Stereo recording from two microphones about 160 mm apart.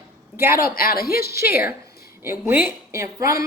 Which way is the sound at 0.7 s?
70° left (ahead or behind).